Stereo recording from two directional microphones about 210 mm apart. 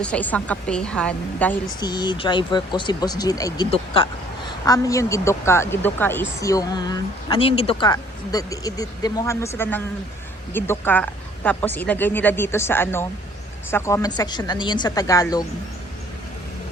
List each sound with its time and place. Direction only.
0.0 s a woman's voice: 5° left (ahead or behind)
1.8 s speech: 20° left (ahead or behind)